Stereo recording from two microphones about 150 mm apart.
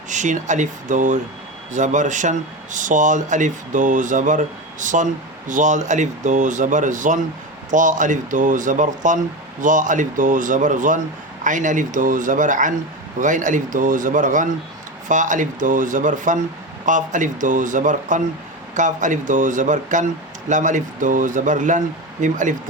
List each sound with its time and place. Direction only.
0.1 s speech: 55° right (ahead or behind)